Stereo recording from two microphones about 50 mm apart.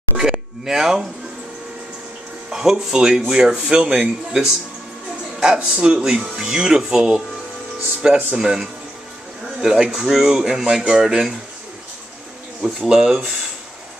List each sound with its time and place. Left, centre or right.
0.2 s a sound: centre
2.5 s speech: centre
3.9 s speech: centre
12.6 s speech: centre